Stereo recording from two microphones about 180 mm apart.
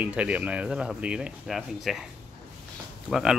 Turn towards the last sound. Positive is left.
turn(degrees=-5)  # may be behind; listen again after turning